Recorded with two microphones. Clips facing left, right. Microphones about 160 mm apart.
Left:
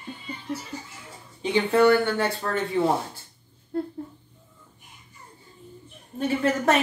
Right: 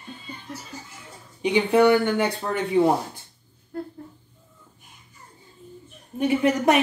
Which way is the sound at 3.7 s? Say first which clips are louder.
Left 4 dB; 25° left (ahead or behind).